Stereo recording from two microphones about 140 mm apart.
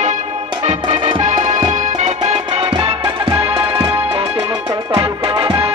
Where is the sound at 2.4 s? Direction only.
35° right (ahead or behind).